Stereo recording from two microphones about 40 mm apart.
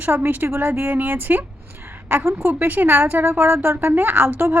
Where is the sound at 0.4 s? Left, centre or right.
Right.